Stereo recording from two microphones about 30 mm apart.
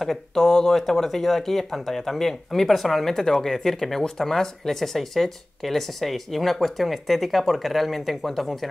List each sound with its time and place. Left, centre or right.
0.3 s speech: centre